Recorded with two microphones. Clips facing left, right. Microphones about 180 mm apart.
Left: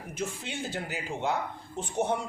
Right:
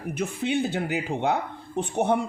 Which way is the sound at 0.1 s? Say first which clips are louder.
Right 9 dB; 60° right (ahead or behind).